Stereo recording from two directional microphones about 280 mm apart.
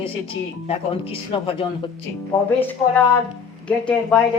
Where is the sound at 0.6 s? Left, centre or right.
Centre.